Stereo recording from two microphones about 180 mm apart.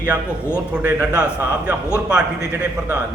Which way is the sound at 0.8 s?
10° right (ahead or behind).